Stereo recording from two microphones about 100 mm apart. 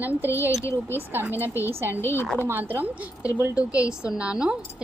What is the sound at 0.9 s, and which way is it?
Speech, 20° right (ahead or behind).